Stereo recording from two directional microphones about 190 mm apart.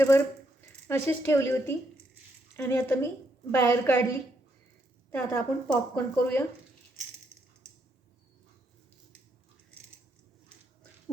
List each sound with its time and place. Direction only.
0.9 s speech: 15° left (ahead or behind)
5.1 s speech: 10° left (ahead or behind)